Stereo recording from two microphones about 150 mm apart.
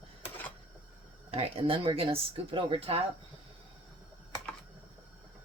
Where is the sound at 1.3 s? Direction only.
40° right (ahead or behind).